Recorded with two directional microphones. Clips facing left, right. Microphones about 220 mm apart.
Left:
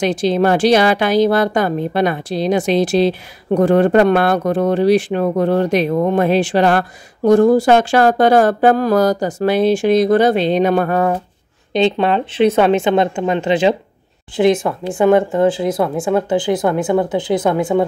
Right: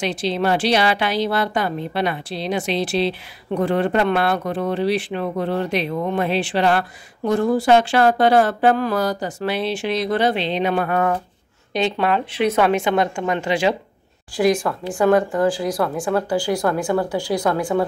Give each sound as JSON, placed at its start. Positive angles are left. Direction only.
{"t": 0.0, "sound": "a woman's voice", "side_deg": 45}
{"t": 11.7, "sound": "speech", "side_deg": 25}